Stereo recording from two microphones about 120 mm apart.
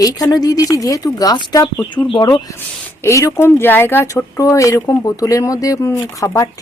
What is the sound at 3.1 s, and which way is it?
Speech, 25° left (ahead or behind).